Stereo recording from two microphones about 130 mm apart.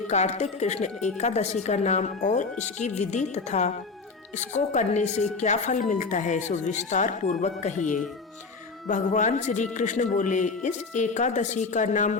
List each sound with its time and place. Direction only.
0.1 s a woman's voice: 60° left (ahead or behind)